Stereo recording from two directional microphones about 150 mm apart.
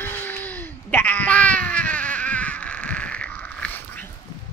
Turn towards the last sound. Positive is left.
turn(degrees=10)  # may be behind; listen again after turning